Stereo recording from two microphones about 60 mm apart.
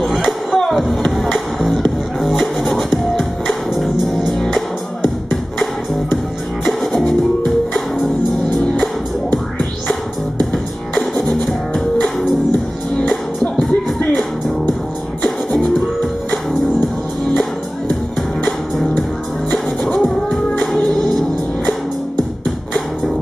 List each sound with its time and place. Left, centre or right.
0.0 s music: centre
6.8 s music: centre
8.7 s music: centre
11.0 s music: centre
13.1 s music: centre
15.2 s music: centre
19.5 s music: centre